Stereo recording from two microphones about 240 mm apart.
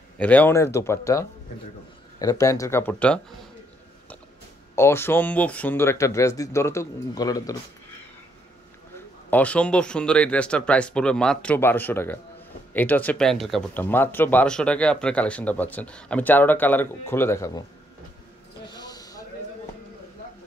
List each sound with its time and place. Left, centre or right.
0.2 s speech: centre
4.7 s speech: centre
9.3 s speech: centre
18.8 s a sound: centre